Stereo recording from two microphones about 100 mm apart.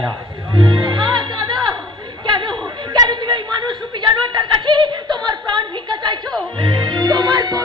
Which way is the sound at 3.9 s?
50° right (ahead or behind).